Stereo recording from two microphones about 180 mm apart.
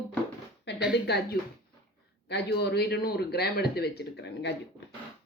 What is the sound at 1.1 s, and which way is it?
A man's voice, 65° left (ahead or behind).